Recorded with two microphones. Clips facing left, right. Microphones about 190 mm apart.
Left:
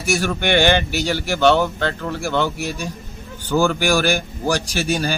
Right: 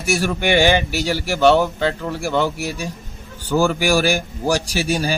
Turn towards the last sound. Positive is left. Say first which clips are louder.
# right 1 dB
turn(degrees=-5)  # may be behind; listen again after turning